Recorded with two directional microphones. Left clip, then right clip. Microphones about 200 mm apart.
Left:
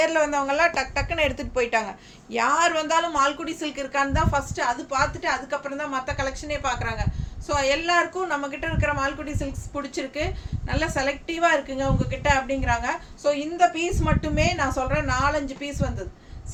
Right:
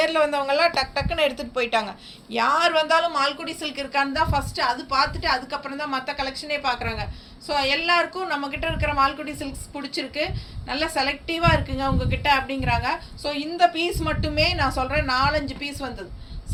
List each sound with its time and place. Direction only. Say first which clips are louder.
0.0 s a woman's voice: right 1 dB; 15° left (ahead or behind)